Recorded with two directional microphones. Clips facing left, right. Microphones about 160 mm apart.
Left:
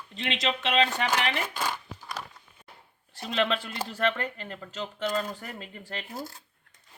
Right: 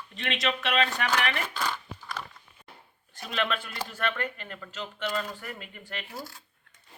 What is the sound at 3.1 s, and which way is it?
Speech, 30° left (ahead or behind).